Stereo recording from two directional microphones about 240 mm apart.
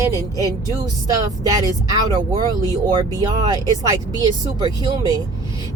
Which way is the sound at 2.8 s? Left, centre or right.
Centre.